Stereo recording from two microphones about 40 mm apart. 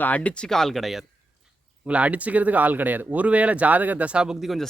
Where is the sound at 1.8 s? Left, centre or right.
Right.